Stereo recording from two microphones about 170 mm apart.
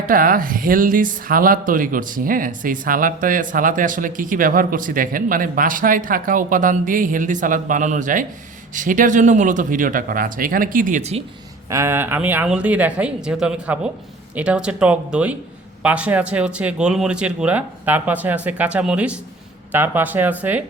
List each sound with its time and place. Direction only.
0.1 s speech: 55° right (ahead or behind)
11.7 s a man's voice: 15° right (ahead or behind)